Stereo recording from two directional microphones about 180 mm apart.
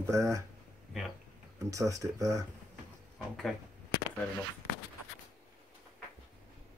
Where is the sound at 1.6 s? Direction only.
20° right (ahead or behind).